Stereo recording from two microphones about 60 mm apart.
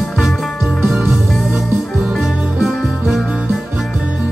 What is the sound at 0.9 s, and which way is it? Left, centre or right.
Music, right.